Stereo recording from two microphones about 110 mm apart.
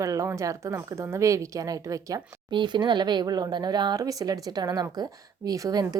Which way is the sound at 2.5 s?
45° right (ahead or behind).